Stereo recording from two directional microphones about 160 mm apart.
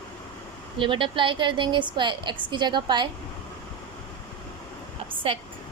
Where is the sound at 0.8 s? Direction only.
30° right (ahead or behind).